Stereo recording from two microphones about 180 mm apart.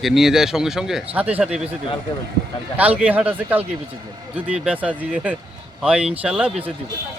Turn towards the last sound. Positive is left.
turn(degrees=-5)  # may be behind; listen again after turning